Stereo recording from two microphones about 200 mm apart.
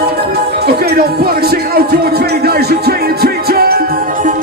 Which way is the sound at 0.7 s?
50° right (ahead or behind).